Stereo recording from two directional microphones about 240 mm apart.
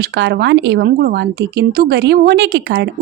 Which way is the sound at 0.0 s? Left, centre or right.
Right.